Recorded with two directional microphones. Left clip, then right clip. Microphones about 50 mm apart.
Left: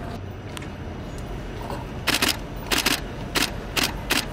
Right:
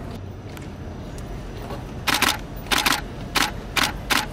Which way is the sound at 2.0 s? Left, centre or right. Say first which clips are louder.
Right 2 dB; centre.